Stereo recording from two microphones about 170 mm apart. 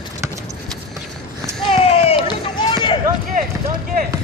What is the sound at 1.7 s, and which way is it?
Run, 35° left (ahead or behind).